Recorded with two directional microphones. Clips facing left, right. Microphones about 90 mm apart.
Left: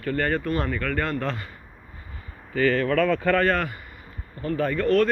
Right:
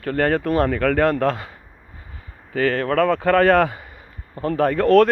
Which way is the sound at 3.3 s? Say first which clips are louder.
Right 7 dB; 90° right.